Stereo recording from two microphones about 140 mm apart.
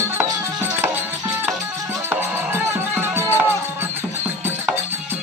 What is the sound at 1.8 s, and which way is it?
Music, 15° right (ahead or behind).